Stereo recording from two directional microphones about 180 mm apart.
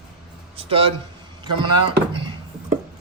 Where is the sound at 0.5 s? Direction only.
30° right (ahead or behind).